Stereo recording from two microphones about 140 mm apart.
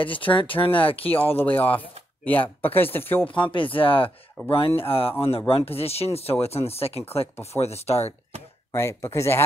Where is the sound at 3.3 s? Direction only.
35° left (ahead or behind).